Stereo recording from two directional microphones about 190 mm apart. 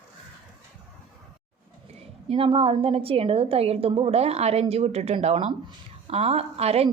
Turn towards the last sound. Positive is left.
turn(degrees=-30)  # may be behind; listen again after turning